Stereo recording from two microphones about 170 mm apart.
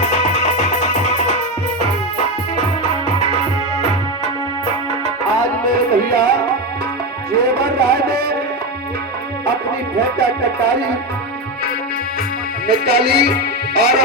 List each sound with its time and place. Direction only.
0.4 s music: 45° left (ahead or behind)
5.6 s music: 60° right (ahead or behind)
7.3 s music: 65° right (ahead or behind)
10.0 s music: 65° right (ahead or behind)
12.6 s music: 70° right (ahead or behind)